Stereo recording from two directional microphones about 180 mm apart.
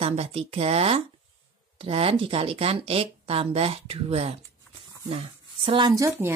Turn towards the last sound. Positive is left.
turn(degrees=-15)  # may be behind; listen again after turning